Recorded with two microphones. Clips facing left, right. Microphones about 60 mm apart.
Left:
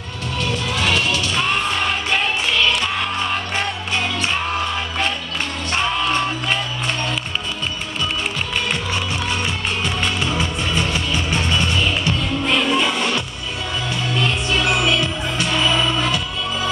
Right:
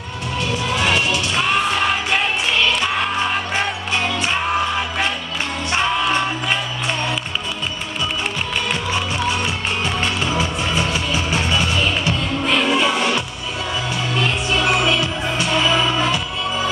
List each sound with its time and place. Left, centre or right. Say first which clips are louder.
0.7 s music: right 1 dB; centre
4.2 s music: right 2 dB; centre
9.8 s music: right 1 dB; centre
14.5 s music: right 1 dB; centre